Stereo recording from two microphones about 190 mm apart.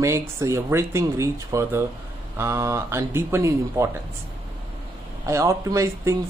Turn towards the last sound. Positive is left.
turn(degrees=-15)  # may be behind; listen again after turning